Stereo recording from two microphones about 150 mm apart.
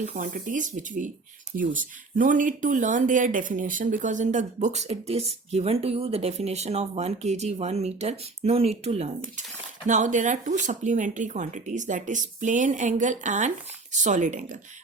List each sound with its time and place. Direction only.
0.0 s speech: 60° right (ahead or behind)